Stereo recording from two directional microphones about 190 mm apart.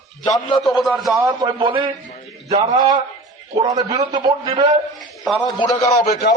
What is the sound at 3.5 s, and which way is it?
A man's voice, 20° right (ahead or behind).